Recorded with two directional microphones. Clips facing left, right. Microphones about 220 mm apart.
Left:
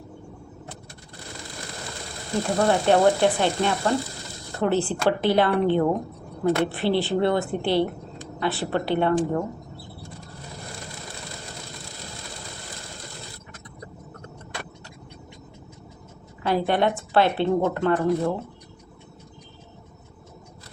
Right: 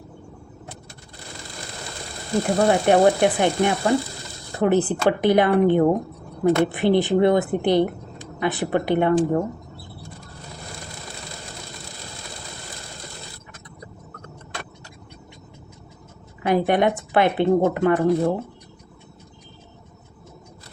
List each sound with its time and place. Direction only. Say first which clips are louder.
2.6 s speech: right 2 dB; 15° right (ahead or behind)
16.4 s speech: right 3 dB; 15° right (ahead or behind)